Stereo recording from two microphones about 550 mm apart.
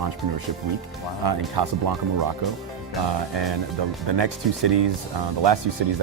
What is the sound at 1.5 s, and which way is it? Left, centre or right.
Speech, right.